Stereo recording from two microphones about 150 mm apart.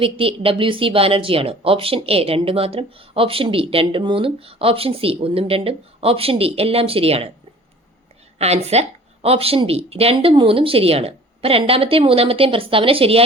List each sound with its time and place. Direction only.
0.0 s speech: 40° right (ahead or behind)
8.4 s speech: 45° right (ahead or behind)